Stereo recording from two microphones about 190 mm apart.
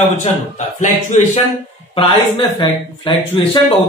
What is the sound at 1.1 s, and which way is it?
Speech, 40° left (ahead or behind).